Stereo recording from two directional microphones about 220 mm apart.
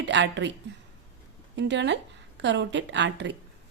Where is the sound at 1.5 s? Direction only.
55° right (ahead or behind).